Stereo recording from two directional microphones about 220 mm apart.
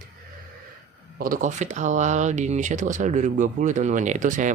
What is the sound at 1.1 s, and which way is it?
Speech, 40° right (ahead or behind).